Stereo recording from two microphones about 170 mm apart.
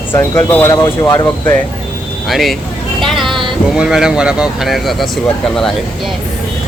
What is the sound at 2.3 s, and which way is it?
Speech, centre (ahead or behind).